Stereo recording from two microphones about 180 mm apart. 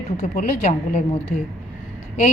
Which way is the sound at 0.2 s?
40° left (ahead or behind).